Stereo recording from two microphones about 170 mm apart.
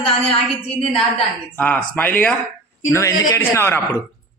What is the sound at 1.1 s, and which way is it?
A man's voice, 10° left (ahead or behind).